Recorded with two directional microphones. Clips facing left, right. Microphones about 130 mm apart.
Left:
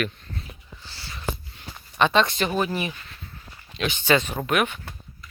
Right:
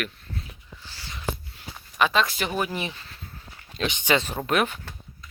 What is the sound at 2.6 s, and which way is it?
Speech, 20° right (ahead or behind).